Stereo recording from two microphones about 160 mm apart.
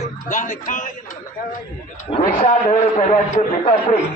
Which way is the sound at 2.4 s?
50° left (ahead or behind).